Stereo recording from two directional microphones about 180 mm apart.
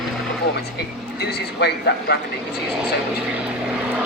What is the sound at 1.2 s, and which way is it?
Speech, 65° left (ahead or behind).